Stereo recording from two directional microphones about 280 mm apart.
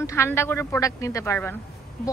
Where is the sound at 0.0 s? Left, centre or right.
Centre.